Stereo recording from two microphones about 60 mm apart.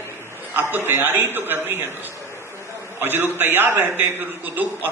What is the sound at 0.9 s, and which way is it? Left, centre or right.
Speech, right.